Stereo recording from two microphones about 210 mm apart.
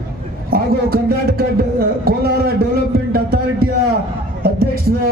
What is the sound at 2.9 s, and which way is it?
Music, 45° right (ahead or behind).